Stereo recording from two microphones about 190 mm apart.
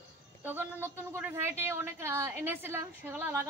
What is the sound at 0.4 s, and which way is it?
A woman's voice, 10° right (ahead or behind).